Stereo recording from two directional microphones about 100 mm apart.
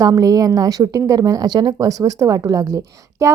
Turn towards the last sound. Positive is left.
turn(degrees=-35)  # may be behind; listen again after turning